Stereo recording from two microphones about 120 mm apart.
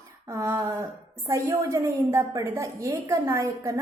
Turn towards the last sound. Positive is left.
turn(degrees=-25)  # may be behind; listen again after turning